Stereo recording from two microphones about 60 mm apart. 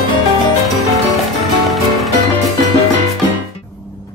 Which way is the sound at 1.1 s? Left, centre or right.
Centre.